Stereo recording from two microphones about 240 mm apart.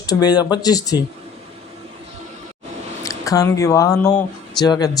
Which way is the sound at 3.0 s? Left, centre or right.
Centre.